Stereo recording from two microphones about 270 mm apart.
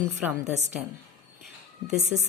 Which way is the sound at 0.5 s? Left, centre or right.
Right.